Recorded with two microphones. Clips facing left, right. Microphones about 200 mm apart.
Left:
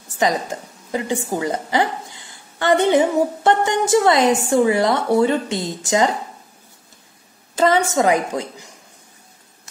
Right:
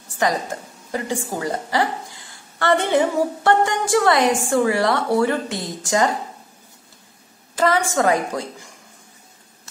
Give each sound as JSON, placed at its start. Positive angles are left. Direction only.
{"t": 0.9, "sound": "a woman's voice", "side_deg": 20}
{"t": 7.5, "sound": "a woman's voice", "side_deg": 20}